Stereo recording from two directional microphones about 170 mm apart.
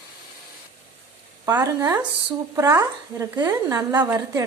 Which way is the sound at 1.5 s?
20° right (ahead or behind).